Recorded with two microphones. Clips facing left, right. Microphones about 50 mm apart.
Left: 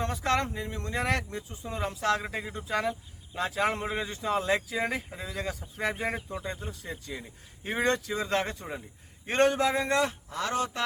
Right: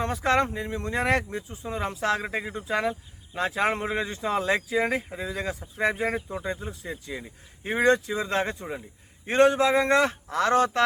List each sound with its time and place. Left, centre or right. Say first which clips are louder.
0.0 s speech: right 4 dB; right
3.8 s speech: right 4 dB; centre
4.2 s speech: right 1 dB; right